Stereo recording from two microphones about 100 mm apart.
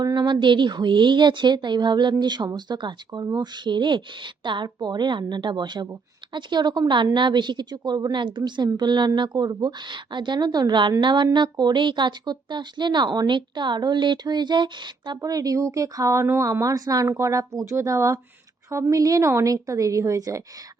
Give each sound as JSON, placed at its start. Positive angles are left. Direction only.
{"t": 0.0, "sound": "a woman's voice", "side_deg": -45}
{"t": 15.2, "sound": "speech", "side_deg": -35}